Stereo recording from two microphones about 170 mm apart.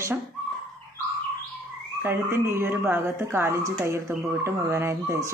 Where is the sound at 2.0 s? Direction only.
15° right (ahead or behind).